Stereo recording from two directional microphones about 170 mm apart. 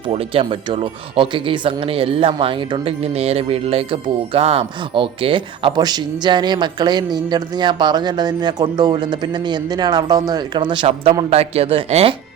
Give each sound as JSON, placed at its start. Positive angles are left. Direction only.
{"t": 0.1, "sound": "speech", "side_deg": -35}